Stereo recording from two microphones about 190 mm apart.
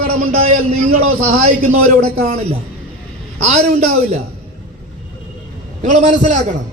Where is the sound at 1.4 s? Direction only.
35° right (ahead or behind).